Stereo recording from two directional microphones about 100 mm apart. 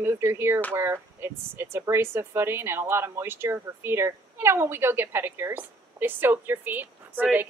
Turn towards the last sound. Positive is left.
turn(degrees=-15)  # may be behind; listen again after turning